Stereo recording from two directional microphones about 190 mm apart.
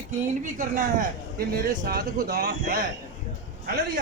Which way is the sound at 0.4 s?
45° right (ahead or behind).